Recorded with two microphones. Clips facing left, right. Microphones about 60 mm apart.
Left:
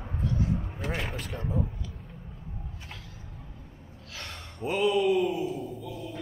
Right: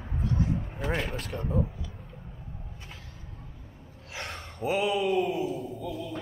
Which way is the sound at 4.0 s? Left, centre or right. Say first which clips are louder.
Right 4 dB; right.